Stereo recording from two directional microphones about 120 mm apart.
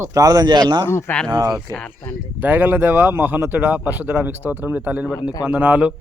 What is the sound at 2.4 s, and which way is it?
Speech, 15° right (ahead or behind).